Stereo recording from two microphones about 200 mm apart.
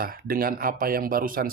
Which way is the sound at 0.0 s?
45° right (ahead or behind).